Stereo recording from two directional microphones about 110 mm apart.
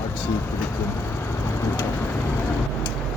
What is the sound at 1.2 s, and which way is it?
Vehicle, 25° left (ahead or behind).